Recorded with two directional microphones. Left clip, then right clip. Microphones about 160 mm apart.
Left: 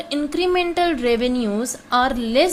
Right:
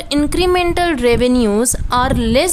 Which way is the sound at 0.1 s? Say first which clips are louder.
Right 6 dB; 30° right (ahead or behind).